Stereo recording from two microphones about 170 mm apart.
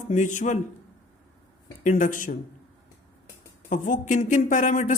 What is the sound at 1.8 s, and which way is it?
Speech, 50° left (ahead or behind).